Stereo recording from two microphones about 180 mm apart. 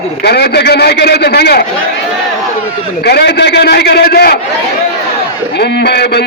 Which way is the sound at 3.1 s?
65° left (ahead or behind).